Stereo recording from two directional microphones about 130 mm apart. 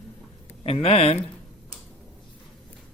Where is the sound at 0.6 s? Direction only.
50° left (ahead or behind).